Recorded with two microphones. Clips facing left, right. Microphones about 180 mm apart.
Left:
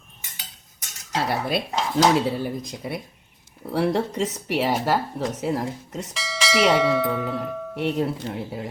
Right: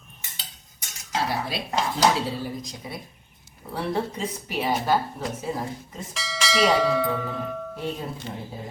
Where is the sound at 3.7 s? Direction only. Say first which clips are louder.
Left 5 dB; 80° left.